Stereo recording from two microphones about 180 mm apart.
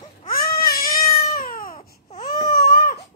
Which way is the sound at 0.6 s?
55° left (ahead or behind).